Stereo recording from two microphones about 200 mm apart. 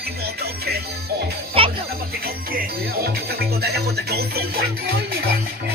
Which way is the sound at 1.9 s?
50° right (ahead or behind).